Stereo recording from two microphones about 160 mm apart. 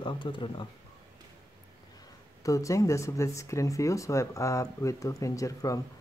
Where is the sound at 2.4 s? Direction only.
20° left (ahead or behind).